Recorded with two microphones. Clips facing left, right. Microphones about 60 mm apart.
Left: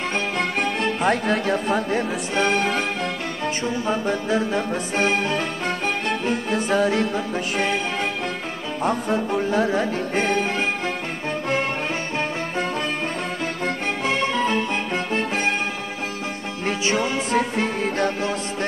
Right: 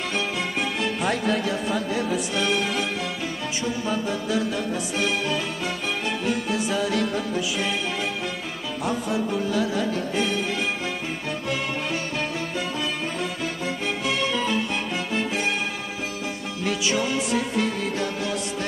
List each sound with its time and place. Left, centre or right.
0.7 s music: left
13.7 s music: left
16.6 s music: left